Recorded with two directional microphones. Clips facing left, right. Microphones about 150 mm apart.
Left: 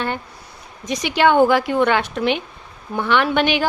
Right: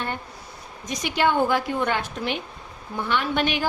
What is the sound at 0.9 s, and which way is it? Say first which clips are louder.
A woman's voice: left 6 dB; 90° left.